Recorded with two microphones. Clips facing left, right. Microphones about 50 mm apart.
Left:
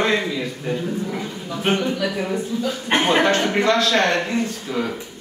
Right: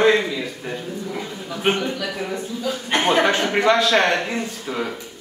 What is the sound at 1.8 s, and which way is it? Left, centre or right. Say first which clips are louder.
Speech: left 3 dB; centre.